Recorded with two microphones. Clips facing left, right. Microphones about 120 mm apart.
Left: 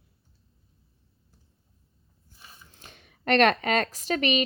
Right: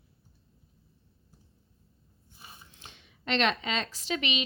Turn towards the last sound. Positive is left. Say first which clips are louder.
# left 6 dB
turn(degrees=45)  # may be behind; listen again after turning